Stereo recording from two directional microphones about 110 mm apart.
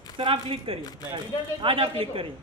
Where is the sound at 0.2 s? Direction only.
55° right (ahead or behind).